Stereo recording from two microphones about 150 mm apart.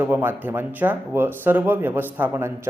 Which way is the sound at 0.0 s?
15° right (ahead or behind).